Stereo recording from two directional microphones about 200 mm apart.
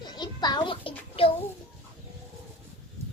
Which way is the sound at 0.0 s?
20° left (ahead or behind).